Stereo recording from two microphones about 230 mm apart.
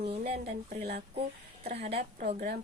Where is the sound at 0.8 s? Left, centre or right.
Right.